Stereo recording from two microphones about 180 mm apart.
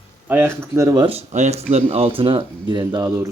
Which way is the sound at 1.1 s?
35° right (ahead or behind).